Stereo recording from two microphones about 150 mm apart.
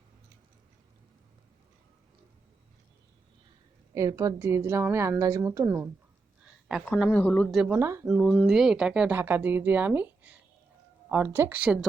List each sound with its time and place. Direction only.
3.9 s speech: 20° right (ahead or behind)
5.6 s speech: 10° right (ahead or behind)
6.4 s a sound: 5° right (ahead or behind)
6.8 s speech: 10° left (ahead or behind)
7.8 s speech: 20° right (ahead or behind)
8.0 s speech: 5° right (ahead or behind)